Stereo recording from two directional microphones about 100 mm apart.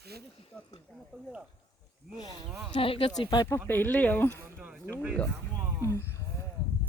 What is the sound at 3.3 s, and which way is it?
Speech, 40° left (ahead or behind).